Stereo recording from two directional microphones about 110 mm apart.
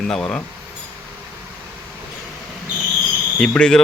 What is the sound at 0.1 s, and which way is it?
Speech, 5° left (ahead or behind).